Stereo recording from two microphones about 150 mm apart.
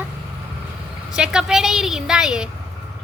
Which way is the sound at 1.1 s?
5° right (ahead or behind).